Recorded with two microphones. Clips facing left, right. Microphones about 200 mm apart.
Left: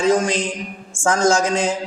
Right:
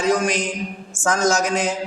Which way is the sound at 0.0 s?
25° left (ahead or behind).